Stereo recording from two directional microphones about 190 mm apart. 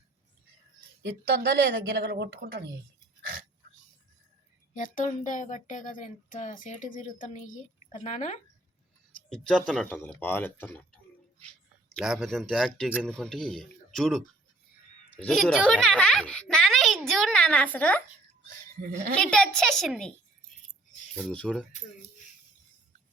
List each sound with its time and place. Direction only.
1.0 s speech: 60° right (ahead or behind)
4.7 s speech: 45° left (ahead or behind)
9.3 s speech: centre (ahead or behind)
11.9 s a child's voice: centre (ahead or behind)
19.2 s speech: 5° left (ahead or behind)